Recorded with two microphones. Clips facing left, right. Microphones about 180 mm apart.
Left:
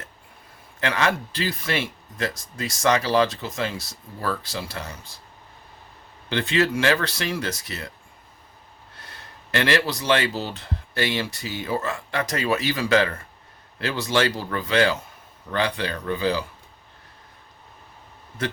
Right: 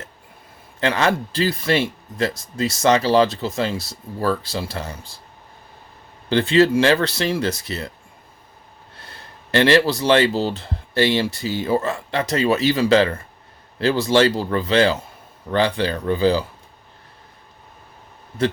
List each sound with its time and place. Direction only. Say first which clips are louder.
0.8 s speech: right 4 dB; 30° right (ahead or behind)
6.2 s speech: right 7 dB; 30° right (ahead or behind)
9.0 s speech: right 3 dB; 30° right (ahead or behind)